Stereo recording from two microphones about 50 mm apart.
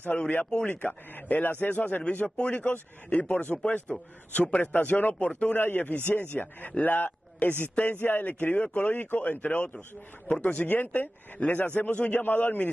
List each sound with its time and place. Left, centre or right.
0.1 s a man's voice: centre
0.7 s speech: left
2.2 s a man's voice: left
3.9 s speech: centre
4.4 s speech: left